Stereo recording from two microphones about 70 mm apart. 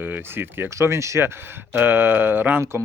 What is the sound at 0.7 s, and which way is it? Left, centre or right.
Speech, right.